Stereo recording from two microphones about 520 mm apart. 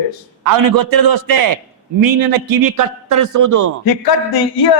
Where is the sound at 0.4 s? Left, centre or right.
Right.